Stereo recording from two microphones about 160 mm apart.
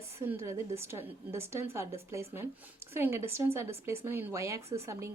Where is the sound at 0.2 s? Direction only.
15° right (ahead or behind).